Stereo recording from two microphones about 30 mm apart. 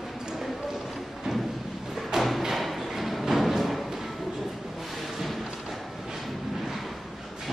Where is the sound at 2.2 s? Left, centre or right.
Centre.